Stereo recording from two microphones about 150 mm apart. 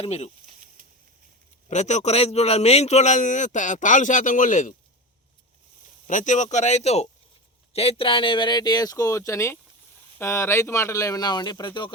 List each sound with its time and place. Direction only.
0.0 s a man's voice: 45° left (ahead or behind)
1.7 s a man's voice: 50° left (ahead or behind)
6.1 s a man's voice: 55° left (ahead or behind); by 11.9 s 30° left (ahead or behind)